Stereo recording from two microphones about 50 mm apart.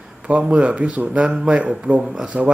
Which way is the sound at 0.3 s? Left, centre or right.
Right.